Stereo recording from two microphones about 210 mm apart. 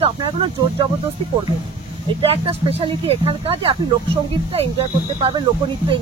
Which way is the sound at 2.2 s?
25° right (ahead or behind).